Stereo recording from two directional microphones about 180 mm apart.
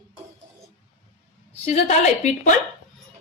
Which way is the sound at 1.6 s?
40° left (ahead or behind).